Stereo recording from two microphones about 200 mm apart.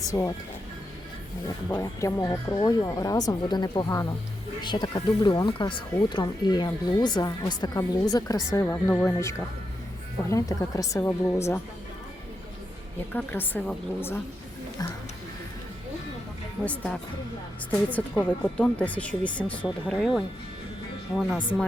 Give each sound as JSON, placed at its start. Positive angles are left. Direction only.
{"t": 0.0, "sound": "speech", "side_deg": 15}
{"t": 1.5, "sound": "speech", "side_deg": 20}
{"t": 13.1, "sound": "speech", "side_deg": 10}
{"t": 17.7, "sound": "speech", "side_deg": 10}